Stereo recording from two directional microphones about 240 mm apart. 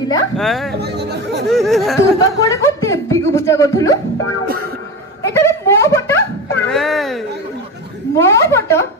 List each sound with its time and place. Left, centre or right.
0.4 s a sound: centre
0.7 s speech: right
1.5 s a sound: centre
2.1 s speech: centre
5.3 s speech: centre
8.2 s speech: centre